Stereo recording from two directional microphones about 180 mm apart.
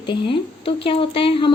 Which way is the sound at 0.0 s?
25° left (ahead or behind).